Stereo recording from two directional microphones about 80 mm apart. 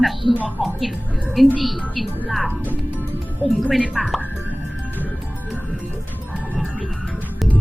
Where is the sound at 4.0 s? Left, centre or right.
Centre.